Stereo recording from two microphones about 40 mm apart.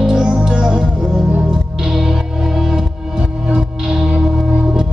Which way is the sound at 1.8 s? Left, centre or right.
Centre.